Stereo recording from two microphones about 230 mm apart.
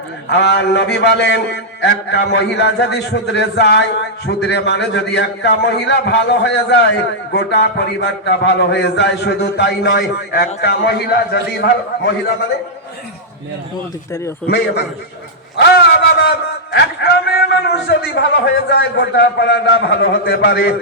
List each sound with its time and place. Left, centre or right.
0.3 s a man's voice: left
14.4 s a man's voice: left